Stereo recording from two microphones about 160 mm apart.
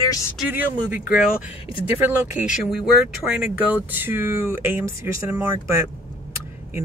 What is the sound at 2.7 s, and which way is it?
Speech, 5° right (ahead or behind).